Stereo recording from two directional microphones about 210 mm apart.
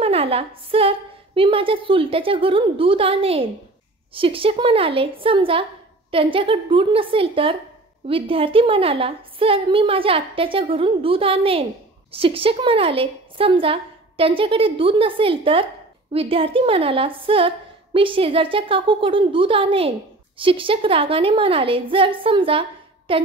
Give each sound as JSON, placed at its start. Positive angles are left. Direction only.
{"t": 0.0, "sound": "a woman's voice", "side_deg": -30}